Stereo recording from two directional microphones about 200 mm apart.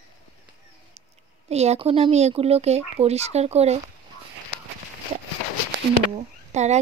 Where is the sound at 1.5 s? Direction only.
35° right (ahead or behind).